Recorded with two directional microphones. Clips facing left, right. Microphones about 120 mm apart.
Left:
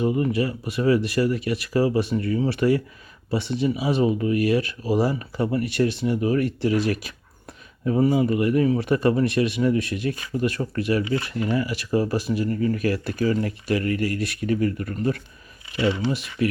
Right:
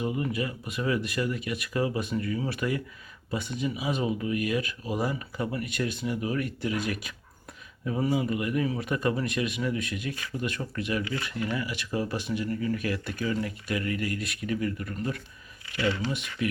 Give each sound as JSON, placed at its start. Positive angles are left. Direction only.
{"t": 0.0, "sound": "speech", "side_deg": 35}
{"t": 7.9, "sound": "speech", "side_deg": 35}
{"t": 10.6, "sound": "speech", "side_deg": 25}
{"t": 15.7, "sound": "speech", "side_deg": 20}
{"t": 16.4, "sound": "speech", "side_deg": 40}